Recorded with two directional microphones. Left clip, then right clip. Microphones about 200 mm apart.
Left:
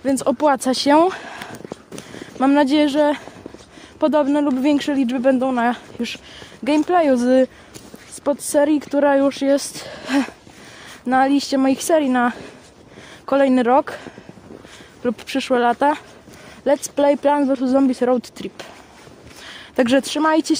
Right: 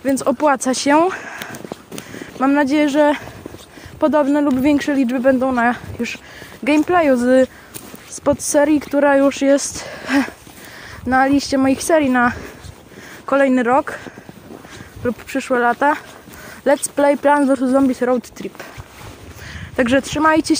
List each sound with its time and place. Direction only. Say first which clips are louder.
0.0 s speech: right 1 dB; 10° left (ahead or behind)
2.9 s speech: right 3 dB; centre (ahead or behind)
8.2 s speech: right 2 dB; 5° right (ahead or behind); by 14.0 s 20° left (ahead or behind)
15.0 s speech: even; 20° left (ahead or behind)
17.7 s speech: right 1 dB; 15° left (ahead or behind)